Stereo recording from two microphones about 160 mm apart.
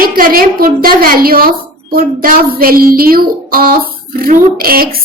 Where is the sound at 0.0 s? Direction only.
65° right (ahead or behind).